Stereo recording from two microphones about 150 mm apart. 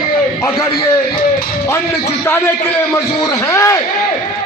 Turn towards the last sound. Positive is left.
turn(degrees=20)  # may be behind; listen again after turning